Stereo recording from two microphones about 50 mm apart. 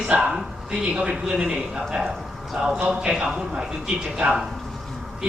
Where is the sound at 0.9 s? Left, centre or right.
Centre.